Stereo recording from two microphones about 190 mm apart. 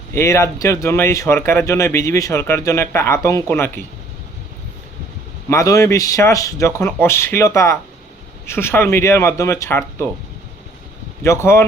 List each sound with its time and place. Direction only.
0.1 s speech: 15° left (ahead or behind)
5.5 s speech: 15° left (ahead or behind)
11.2 s speech: 15° left (ahead or behind)